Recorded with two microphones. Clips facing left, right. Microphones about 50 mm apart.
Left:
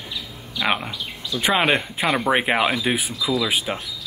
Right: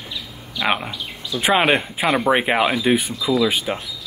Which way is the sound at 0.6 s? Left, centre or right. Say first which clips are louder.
Right 1 dB; centre.